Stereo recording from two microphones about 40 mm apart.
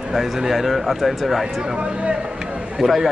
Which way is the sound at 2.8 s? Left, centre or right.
Centre.